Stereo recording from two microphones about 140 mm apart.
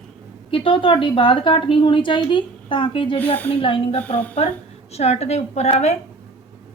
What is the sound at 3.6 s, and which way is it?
Speech, 40° left (ahead or behind).